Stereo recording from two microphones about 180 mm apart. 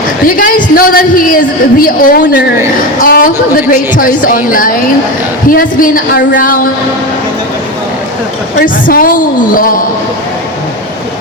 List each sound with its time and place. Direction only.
0.3 s a woman's voice: 50° left (ahead or behind)
8.6 s a woman's voice: 50° left (ahead or behind)